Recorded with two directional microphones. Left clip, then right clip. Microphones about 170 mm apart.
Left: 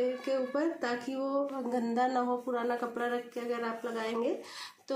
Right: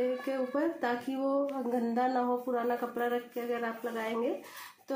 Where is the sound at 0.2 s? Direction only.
15° right (ahead or behind).